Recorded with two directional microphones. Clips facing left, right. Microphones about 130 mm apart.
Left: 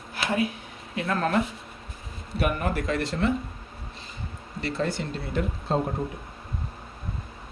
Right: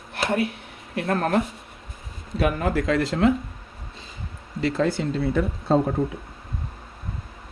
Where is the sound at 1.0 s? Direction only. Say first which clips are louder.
Right 3 dB; 50° right (ahead or behind).